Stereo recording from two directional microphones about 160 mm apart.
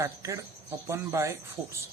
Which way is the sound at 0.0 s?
20° right (ahead or behind).